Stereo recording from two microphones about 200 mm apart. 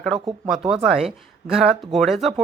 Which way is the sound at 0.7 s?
5° right (ahead or behind).